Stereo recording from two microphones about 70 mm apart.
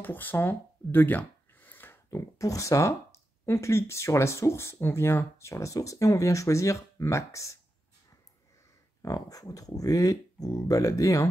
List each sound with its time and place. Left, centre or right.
0.0 s a sound: left
2.0 s speech: left
3.4 s speech: left
9.0 s speech: left